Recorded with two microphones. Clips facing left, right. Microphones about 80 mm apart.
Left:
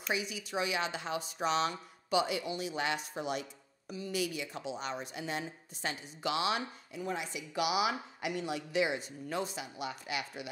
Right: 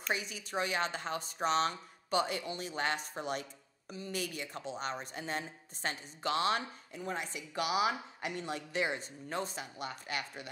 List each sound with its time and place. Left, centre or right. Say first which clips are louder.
0.0 s speech: left 1 dB; right